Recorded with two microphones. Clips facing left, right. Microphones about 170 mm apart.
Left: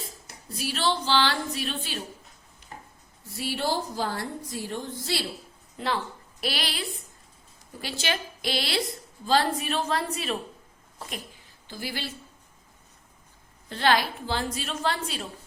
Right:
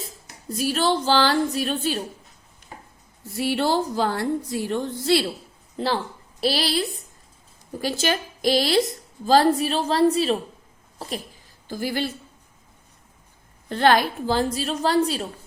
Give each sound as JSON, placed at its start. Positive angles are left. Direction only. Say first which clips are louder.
{"t": 0.5, "sound": "a woman's voice", "louder": "right 6 dB", "side_deg": -45}
{"t": 3.3, "sound": "a woman's voice", "louder": "right 7 dB", "side_deg": -65}
{"t": 5.7, "sound": "a woman's voice", "louder": "right 5 dB", "side_deg": -35}
{"t": 11.7, "sound": "a woman's voice", "louder": "right 9 dB", "side_deg": -45}
{"t": 13.7, "sound": "a woman's voice", "louder": "right 5 dB", "side_deg": -50}